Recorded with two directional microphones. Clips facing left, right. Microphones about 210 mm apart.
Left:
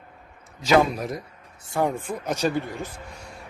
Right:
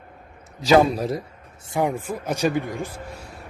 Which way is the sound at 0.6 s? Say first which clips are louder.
Right 3 dB; 35° right (ahead or behind).